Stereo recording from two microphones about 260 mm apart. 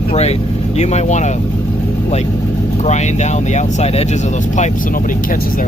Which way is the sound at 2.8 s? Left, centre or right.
Left.